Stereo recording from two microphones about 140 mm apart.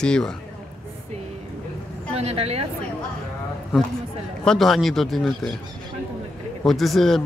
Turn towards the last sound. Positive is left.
turn(degrees=0)  # may be behind; listen again after turning